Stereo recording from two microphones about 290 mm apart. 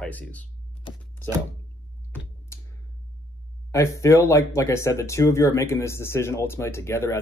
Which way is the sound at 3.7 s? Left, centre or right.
Centre.